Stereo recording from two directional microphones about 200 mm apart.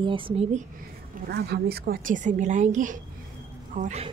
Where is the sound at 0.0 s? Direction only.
25° right (ahead or behind).